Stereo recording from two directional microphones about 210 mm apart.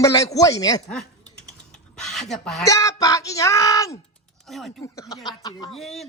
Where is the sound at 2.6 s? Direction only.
15° left (ahead or behind).